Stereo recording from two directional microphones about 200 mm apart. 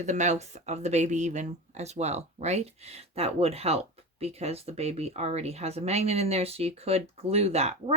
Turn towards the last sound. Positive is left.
turn(degrees=-30)  # may be behind; listen again after turning